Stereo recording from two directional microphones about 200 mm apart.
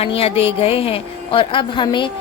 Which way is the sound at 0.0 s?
30° left (ahead or behind).